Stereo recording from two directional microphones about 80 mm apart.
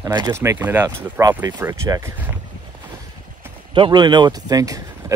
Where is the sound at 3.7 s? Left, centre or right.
Right.